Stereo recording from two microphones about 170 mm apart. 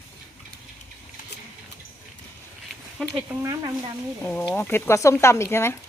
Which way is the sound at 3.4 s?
20° right (ahead or behind).